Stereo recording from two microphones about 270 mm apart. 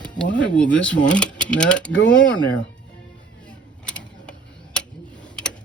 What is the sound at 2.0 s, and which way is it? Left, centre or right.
Speech, left.